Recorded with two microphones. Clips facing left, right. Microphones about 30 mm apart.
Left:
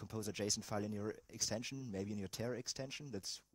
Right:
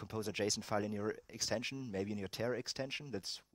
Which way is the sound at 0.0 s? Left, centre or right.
Right.